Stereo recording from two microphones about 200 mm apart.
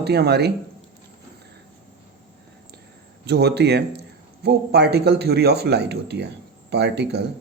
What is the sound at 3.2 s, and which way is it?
Speech, 55° right (ahead or behind).